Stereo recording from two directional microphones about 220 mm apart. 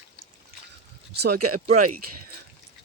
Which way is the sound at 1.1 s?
50° right (ahead or behind).